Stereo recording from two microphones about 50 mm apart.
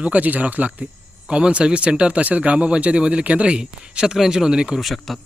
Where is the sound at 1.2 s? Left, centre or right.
Centre.